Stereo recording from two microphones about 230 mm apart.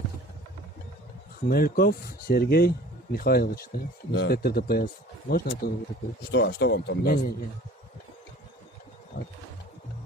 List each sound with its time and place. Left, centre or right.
1.5 s speech: left
9.2 s wild animals: left